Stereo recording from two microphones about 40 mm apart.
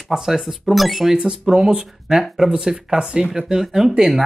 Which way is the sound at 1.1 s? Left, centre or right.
Centre.